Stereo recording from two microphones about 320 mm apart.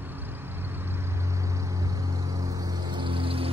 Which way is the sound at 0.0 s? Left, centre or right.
Centre.